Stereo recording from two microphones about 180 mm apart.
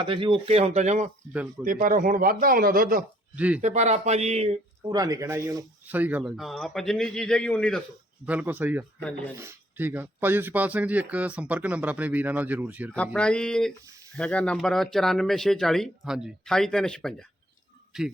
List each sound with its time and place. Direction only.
0.0 s speech: 30° right (ahead or behind)
1.6 s speech: 50° right (ahead or behind)
3.3 s a man's voice: 10° right (ahead or behind)
3.6 s speech: 40° right (ahead or behind)
4.9 s speech: 20° right (ahead or behind); by 7.8 s 5° left (ahead or behind)
8.3 s a man's voice: 10° right (ahead or behind)
13.1 s speech: 5° left (ahead or behind)